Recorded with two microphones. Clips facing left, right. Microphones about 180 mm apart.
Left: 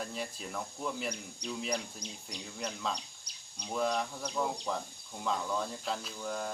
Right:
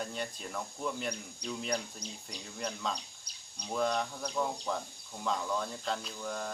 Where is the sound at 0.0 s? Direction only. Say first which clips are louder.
Right 1 dB; centre (ahead or behind).